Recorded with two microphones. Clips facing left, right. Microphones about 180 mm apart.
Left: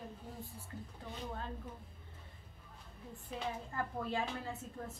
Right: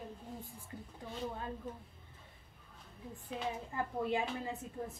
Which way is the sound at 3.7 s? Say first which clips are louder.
Right 6 dB; 15° right (ahead or behind).